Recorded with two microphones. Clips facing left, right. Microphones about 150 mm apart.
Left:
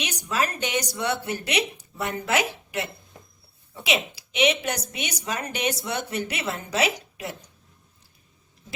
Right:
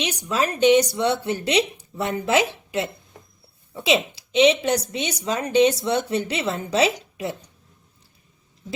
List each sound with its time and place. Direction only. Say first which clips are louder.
0.0 s speech: right 3 dB; 25° right (ahead or behind)